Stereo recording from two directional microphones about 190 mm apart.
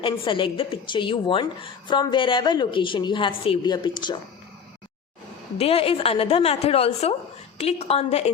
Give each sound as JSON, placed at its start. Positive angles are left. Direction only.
{"t": 0.0, "sound": "a woman's voice", "side_deg": 25}
{"t": 5.5, "sound": "a woman's voice", "side_deg": 30}